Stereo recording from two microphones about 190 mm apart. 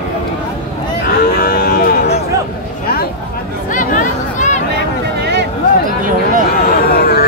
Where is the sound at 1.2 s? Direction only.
50° left (ahead or behind).